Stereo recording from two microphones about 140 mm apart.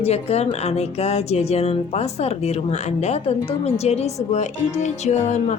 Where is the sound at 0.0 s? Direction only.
50° left (ahead or behind).